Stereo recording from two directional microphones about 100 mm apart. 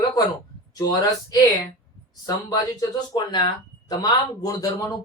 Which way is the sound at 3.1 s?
50° left (ahead or behind).